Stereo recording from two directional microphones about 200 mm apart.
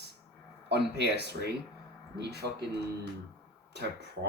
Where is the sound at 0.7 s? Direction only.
55° right (ahead or behind).